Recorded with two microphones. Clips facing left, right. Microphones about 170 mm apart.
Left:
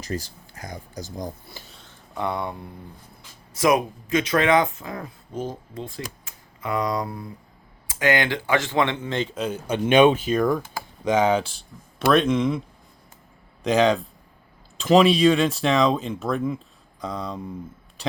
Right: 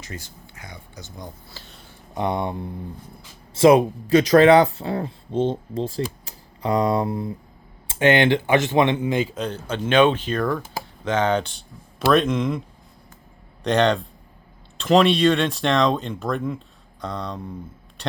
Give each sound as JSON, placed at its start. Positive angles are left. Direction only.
{"t": 0.0, "sound": "speech", "side_deg": 35}
{"t": 1.5, "sound": "speech", "side_deg": 5}
{"t": 2.1, "sound": "speech", "side_deg": -20}
{"t": 9.3, "sound": "speech", "side_deg": 5}
{"t": 13.7, "sound": "speech", "side_deg": 5}